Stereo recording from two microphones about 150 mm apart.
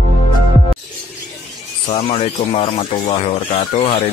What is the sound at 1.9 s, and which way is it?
Speech, 40° left (ahead or behind).